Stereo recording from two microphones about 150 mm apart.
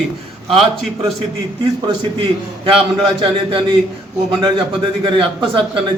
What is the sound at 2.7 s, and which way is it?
A man's voice, 35° right (ahead or behind).